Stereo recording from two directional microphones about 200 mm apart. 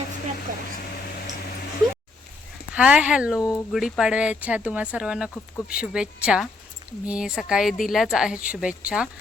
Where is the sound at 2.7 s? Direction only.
5° right (ahead or behind).